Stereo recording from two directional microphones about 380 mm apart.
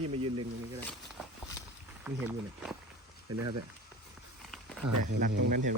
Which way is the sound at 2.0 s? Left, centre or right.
Centre.